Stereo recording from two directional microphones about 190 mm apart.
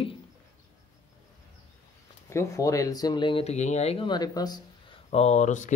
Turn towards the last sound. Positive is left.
turn(degrees=40)  # may be behind; listen again after turning